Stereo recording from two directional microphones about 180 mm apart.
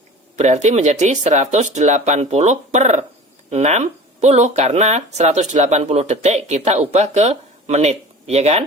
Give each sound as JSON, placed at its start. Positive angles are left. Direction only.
{"t": 0.3, "sound": "speech", "side_deg": -40}